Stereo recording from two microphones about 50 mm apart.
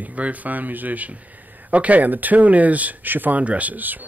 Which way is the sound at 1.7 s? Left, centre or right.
Right.